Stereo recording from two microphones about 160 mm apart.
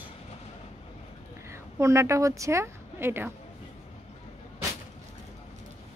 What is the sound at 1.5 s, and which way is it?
A woman's voice, 20° right (ahead or behind).